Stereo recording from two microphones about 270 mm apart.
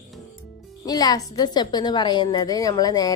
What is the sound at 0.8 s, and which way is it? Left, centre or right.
A woman's voice, centre.